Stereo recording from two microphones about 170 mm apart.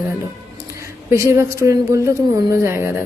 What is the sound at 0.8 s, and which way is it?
A woman's voice, 15° right (ahead or behind).